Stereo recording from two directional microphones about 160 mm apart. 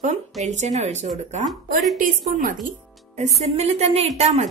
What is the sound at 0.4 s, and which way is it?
A woman's voice, 45° right (ahead or behind).